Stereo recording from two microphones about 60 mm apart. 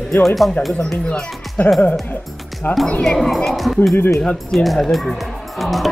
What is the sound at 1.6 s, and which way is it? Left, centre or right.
Speech, left.